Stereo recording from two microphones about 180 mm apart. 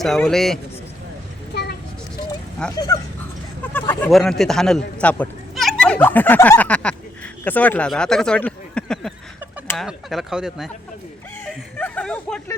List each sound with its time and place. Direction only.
0.0 s speech: centre (ahead or behind)
2.7 s speech: 20° left (ahead or behind)
3.7 s speech: 10° left (ahead or behind)
11.4 s a sound: 5° left (ahead or behind)